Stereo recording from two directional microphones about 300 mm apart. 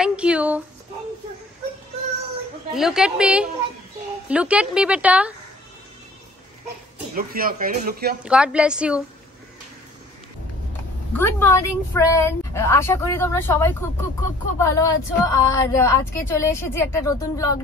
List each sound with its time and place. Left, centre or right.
0.0 s speech: centre
2.7 s a woman's voice: centre
7.2 s speech: right
8.2 s a woman's voice: centre
11.1 s a woman's voice: centre